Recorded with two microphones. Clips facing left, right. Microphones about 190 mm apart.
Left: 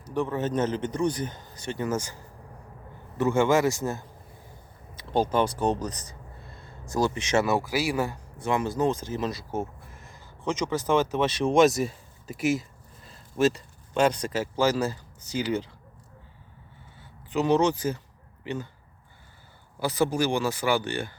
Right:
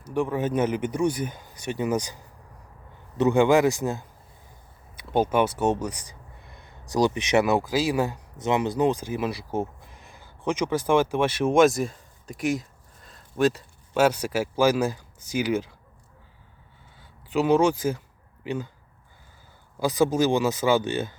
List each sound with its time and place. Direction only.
0.1 s speech: 10° right (ahead or behind)
17.0 s a sound: 10° right (ahead or behind)
18.4 s speech: 10° right (ahead or behind)
19.8 s speech: 15° right (ahead or behind)